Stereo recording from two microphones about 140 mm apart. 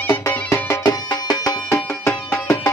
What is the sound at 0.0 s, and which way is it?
Music, 20° left (ahead or behind).